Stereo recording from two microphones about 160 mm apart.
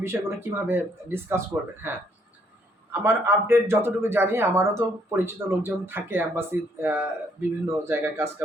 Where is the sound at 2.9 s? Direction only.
15° right (ahead or behind).